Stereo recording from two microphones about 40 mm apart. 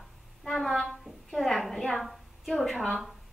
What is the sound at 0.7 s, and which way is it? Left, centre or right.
A woman's voice, centre.